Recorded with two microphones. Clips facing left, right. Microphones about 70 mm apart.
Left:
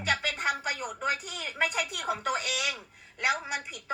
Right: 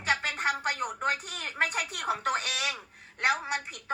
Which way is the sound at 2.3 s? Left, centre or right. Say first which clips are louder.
Even; right.